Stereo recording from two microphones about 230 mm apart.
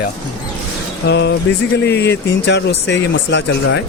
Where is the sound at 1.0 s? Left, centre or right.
Left.